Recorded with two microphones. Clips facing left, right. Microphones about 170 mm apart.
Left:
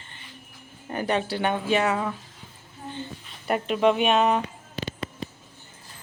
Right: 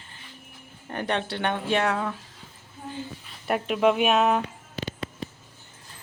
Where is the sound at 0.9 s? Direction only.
5° left (ahead or behind).